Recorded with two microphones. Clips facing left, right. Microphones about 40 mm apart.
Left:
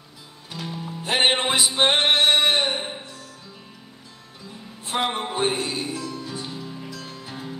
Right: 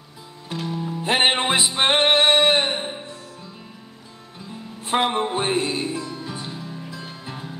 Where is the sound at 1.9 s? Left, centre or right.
Right.